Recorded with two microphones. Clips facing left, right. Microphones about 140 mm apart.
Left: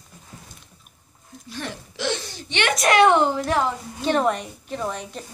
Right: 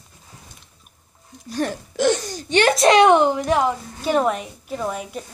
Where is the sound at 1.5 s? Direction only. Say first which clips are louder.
Right 9 dB; 45° right (ahead or behind).